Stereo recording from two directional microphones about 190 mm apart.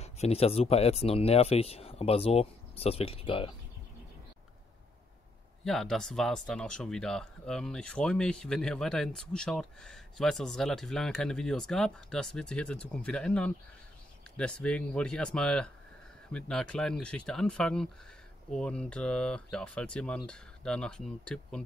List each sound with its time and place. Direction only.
0.0 s speech: 35° left (ahead or behind)
5.6 s speech: centre (ahead or behind)